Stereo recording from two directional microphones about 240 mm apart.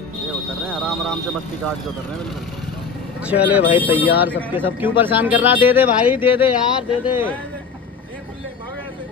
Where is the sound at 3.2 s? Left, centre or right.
Centre.